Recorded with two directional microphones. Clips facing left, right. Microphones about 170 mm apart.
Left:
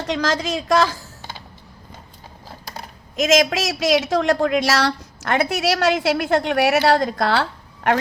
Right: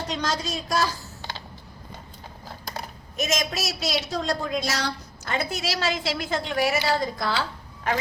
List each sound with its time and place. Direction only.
0.1 s a woman's voice: 90° left
3.2 s a woman's voice: 90° left; by 7.4 s 70° left (ahead or behind)